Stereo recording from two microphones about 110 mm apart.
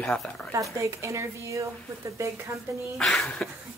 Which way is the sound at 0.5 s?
25° right (ahead or behind).